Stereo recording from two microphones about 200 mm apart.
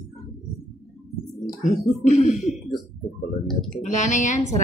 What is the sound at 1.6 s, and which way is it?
Speech, 35° left (ahead or behind).